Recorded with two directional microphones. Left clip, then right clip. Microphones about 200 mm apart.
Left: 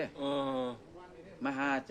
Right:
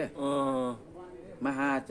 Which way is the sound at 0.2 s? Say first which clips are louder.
Right 5 dB; centre (ahead or behind).